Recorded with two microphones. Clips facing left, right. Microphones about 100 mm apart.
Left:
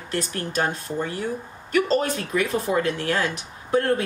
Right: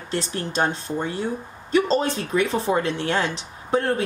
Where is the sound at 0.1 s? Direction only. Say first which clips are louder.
Even; 25° right (ahead or behind).